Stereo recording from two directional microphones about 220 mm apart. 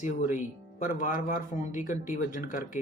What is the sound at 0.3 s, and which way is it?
Speech, 35° left (ahead or behind).